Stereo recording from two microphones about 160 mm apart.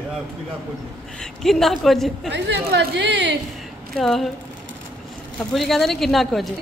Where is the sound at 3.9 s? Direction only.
Centre (ahead or behind).